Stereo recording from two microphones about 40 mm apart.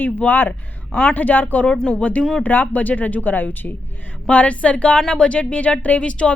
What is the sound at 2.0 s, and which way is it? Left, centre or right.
A woman's voice, left.